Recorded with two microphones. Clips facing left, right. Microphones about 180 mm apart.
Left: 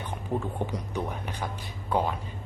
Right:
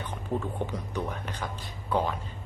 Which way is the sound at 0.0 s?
15° left (ahead or behind).